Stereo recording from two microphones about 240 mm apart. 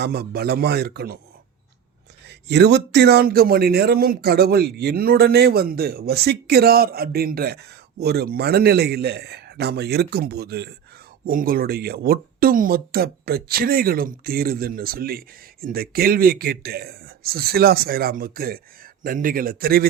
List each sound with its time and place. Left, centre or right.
0.0 s a man's voice: right
2.2 s a man's voice: right